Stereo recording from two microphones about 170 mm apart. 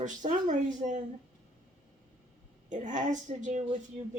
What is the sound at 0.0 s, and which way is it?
Speech, 45° right (ahead or behind).